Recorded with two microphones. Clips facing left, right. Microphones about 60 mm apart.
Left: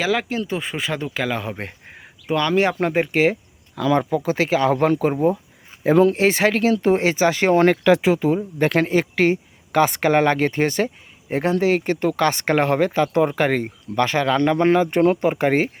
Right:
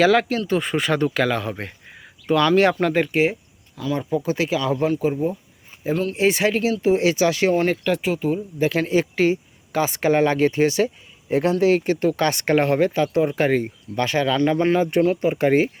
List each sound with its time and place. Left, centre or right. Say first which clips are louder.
0.0 s speech: right 5 dB; centre
1.4 s speech: right 1 dB; left
2.2 s speech: right 3 dB; centre
3.1 s speech: left 2 dB; left
3.8 s speech: left 4 dB; left
4.3 s speech: left 4 dB; left
4.8 s speech: left 3 dB; left
6.1 s speech: left 1 dB; left
6.5 s speech: left 2 dB; left
7.1 s speech: left 1 dB; left
7.5 s speech: left 5 dB; left
8.6 s speech: left 2 dB; left
8.9 s speech: left 1 dB; left